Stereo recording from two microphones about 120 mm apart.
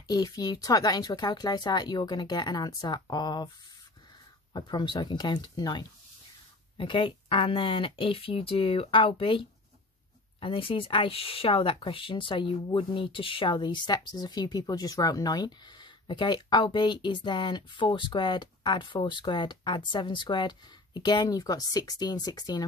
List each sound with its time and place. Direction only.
0.1 s speech: 35° left (ahead or behind)
4.6 s speech: 35° left (ahead or behind)